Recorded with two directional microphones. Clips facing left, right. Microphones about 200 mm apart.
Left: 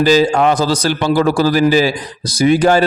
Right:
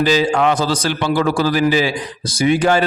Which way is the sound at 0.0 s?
40° left (ahead or behind).